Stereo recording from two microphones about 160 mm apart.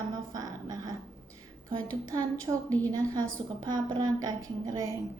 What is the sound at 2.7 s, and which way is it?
A woman's voice, 25° right (ahead or behind).